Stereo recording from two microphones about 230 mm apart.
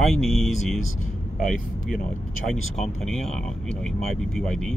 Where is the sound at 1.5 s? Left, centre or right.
Left.